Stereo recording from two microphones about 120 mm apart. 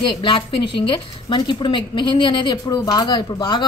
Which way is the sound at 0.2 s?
45° left (ahead or behind).